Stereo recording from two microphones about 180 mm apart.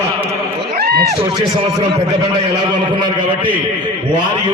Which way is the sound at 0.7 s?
60° right (ahead or behind).